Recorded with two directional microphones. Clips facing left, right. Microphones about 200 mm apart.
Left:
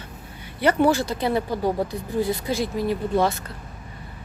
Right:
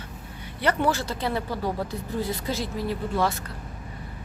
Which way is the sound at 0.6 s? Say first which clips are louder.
Left 5 dB; 10° left (ahead or behind).